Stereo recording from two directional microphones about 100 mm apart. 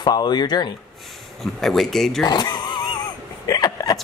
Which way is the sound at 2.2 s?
45° left (ahead or behind).